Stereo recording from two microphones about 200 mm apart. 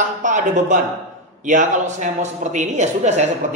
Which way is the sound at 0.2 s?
40° right (ahead or behind).